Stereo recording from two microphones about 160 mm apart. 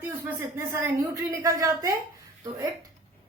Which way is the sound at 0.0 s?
10° right (ahead or behind).